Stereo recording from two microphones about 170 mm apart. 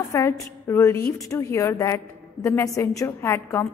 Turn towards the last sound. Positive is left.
turn(degrees=15)  # may be behind; listen again after turning